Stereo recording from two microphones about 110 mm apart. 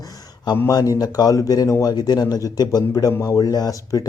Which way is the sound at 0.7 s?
35° left (ahead or behind).